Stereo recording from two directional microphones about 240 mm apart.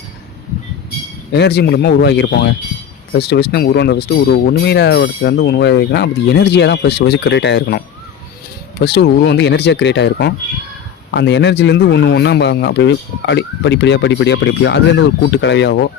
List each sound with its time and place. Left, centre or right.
1.3 s speech: left
8.8 s speech: left